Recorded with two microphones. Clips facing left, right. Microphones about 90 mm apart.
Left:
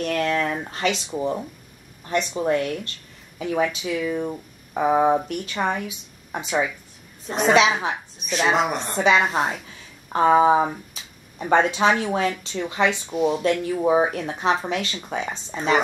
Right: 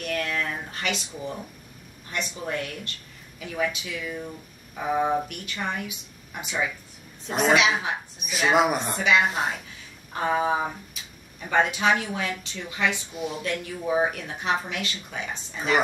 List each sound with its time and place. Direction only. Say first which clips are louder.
0.0 s speech: left 6 dB; 30° left (ahead or behind)
4.7 s speech: left 6 dB; 40° left (ahead or behind)
7.2 s a woman's voice: left 2 dB; centre (ahead or behind)
7.5 s speech: left 5 dB; 30° left (ahead or behind)
8.5 s a woman's voice: right 1 dB; 5° right (ahead or behind)
8.9 s speech: left 8 dB; 30° left (ahead or behind)